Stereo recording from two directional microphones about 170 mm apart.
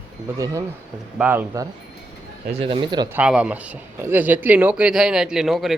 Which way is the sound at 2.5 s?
35° right (ahead or behind).